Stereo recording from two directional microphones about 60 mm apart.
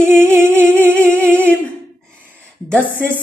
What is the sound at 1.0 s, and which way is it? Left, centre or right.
Humming, left.